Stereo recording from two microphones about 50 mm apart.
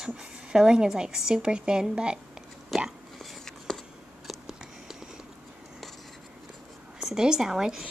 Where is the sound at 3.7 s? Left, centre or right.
Centre.